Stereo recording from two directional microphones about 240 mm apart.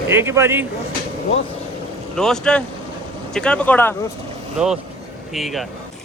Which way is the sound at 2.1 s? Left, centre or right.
Centre.